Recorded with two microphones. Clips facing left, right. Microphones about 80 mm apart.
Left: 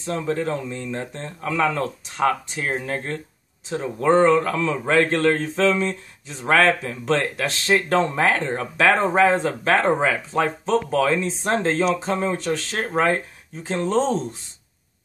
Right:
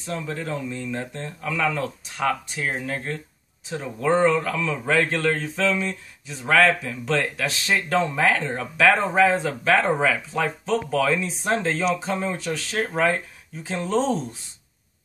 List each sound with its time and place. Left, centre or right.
0.0 s a man's voice: left